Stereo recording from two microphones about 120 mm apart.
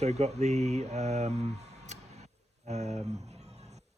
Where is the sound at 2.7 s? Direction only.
65° right (ahead or behind).